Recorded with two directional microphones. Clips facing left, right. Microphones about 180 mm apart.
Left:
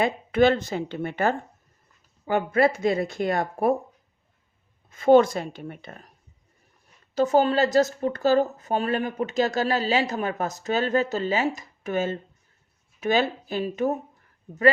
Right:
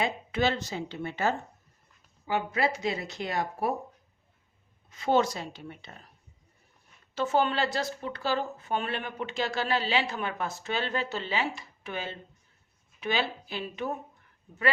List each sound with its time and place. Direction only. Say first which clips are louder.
0.0 s speech: left 8 dB; 55° left (ahead or behind)
4.9 s speech: left 9 dB; 50° left (ahead or behind)
7.2 s a woman's voice: left 7 dB; 40° left (ahead or behind)